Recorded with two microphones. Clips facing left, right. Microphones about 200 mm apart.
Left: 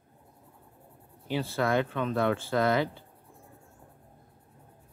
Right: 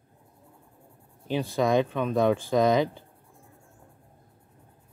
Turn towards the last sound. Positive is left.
turn(degrees=-15)  # may be behind; listen again after turning